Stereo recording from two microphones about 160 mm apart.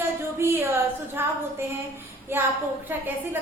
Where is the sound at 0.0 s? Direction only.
15° right (ahead or behind).